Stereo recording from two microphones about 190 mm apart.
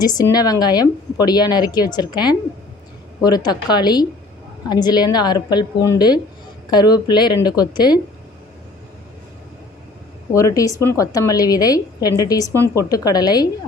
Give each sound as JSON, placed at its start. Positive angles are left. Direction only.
{"t": 0.0, "sound": "a woman's voice", "side_deg": 20}
{"t": 10.3, "sound": "a woman's voice", "side_deg": 15}